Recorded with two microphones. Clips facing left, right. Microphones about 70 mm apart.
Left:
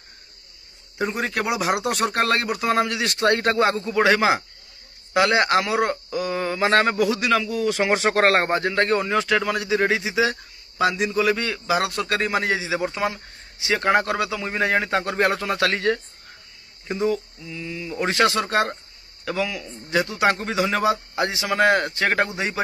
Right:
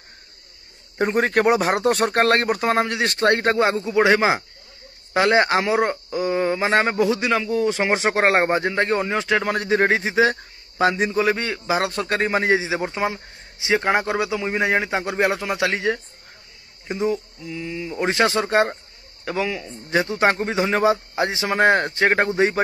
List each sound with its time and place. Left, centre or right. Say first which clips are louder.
0.9 s a man's voice: right 6 dB; right
2.7 s a man's voice: right 1 dB; right
9.4 s a man's voice: right 2 dB; right